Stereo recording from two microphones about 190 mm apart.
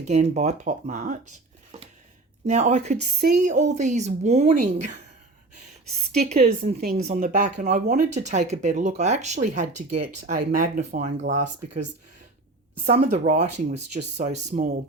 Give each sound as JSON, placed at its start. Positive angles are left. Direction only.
{"t": 0.0, "sound": "speech", "side_deg": -35}
{"t": 2.5, "sound": "speech", "side_deg": -35}
{"t": 6.2, "sound": "speech", "side_deg": -35}